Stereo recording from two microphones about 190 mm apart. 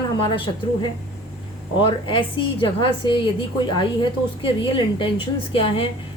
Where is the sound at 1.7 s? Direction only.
25° left (ahead or behind).